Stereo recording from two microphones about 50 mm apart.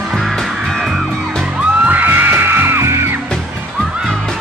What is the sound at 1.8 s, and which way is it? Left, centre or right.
Music, right.